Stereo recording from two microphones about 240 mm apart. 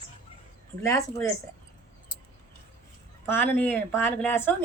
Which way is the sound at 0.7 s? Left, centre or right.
Right.